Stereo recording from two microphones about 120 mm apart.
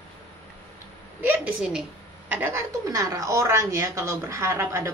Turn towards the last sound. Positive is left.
turn(degrees=-20)  # may be behind; listen again after turning